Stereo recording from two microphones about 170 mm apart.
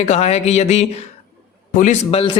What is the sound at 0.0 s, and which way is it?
A man's voice, 40° left (ahead or behind).